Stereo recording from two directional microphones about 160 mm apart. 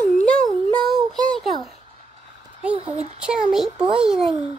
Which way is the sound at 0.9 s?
30° right (ahead or behind).